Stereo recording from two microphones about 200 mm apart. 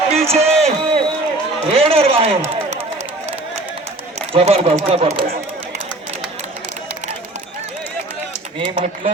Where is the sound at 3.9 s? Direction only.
30° right (ahead or behind).